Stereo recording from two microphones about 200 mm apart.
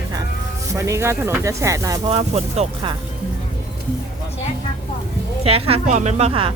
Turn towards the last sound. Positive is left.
turn(degrees=-30)  # may be behind; listen again after turning